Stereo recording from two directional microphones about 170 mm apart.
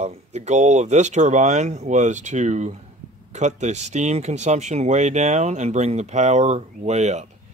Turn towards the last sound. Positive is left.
turn(degrees=-40)  # may be behind; listen again after turning